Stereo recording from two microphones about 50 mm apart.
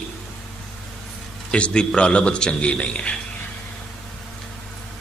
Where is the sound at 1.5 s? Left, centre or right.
Left.